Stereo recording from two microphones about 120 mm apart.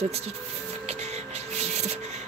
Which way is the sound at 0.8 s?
65° right (ahead or behind).